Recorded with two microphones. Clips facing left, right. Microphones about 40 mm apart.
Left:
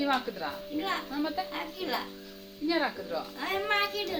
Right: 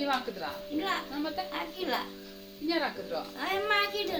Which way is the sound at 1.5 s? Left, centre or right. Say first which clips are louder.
Right 1 dB; centre.